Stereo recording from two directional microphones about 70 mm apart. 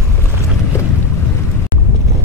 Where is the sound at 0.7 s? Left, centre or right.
Left.